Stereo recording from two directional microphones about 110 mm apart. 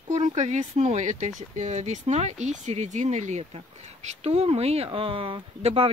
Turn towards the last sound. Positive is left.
turn(degrees=-65)  # may be behind; listen again after turning